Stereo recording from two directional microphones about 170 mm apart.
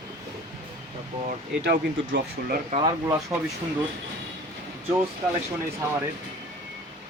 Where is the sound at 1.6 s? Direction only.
80° right.